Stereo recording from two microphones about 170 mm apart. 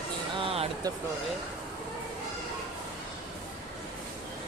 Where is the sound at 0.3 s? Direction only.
35° right (ahead or behind).